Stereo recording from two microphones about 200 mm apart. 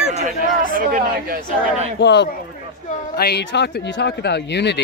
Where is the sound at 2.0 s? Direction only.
60° left (ahead or behind).